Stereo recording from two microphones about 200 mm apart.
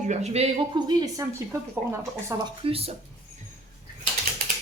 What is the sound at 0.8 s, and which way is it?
Speech, 20° right (ahead or behind).